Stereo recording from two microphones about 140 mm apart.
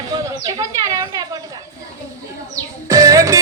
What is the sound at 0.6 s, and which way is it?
Speech, 25° right (ahead or behind).